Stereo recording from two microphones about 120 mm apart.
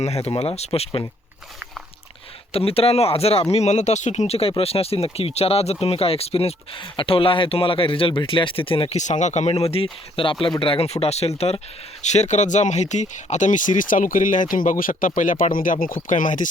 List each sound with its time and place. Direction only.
0.0 s speech: 60° left (ahead or behind)
2.5 s speech: 50° left (ahead or behind)
3.5 s speech: 70° left (ahead or behind); by 9.0 s 50° left (ahead or behind)
9.0 s speech: 80° left; by 11.6 s 60° left (ahead or behind)
12.1 s speech: 75° left (ahead or behind)